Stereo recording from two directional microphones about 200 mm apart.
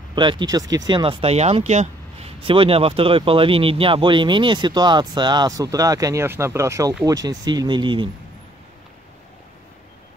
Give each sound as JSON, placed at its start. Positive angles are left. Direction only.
{"t": 0.1, "sound": "speech", "side_deg": -20}